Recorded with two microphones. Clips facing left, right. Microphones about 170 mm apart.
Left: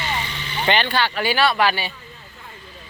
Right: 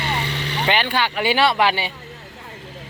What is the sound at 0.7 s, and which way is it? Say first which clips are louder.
Speech: left 1 dB; 10° right (ahead or behind).